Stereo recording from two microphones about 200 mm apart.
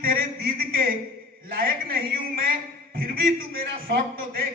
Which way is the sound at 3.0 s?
50° right (ahead or behind).